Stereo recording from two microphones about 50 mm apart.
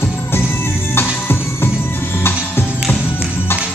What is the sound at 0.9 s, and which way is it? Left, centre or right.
Music, left.